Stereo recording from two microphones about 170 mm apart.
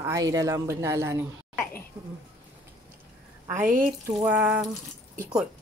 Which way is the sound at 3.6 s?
50° right (ahead or behind).